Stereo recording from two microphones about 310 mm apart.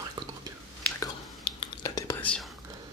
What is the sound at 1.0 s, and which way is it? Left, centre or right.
Whispering, centre.